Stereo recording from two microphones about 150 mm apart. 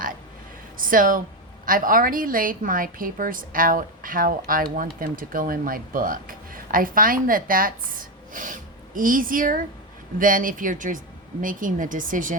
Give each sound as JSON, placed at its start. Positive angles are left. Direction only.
{"t": 0.8, "sound": "speech", "side_deg": -65}